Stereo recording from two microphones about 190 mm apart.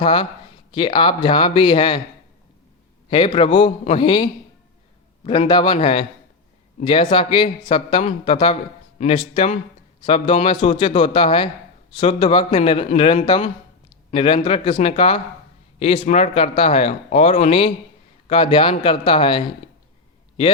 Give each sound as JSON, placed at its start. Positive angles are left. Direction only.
{"t": 0.0, "sound": "a man's voice", "side_deg": 25}
{"t": 3.1, "sound": "a man's voice", "side_deg": 25}